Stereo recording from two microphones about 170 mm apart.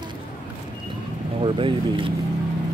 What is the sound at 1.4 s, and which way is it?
Speech, 30° right (ahead or behind).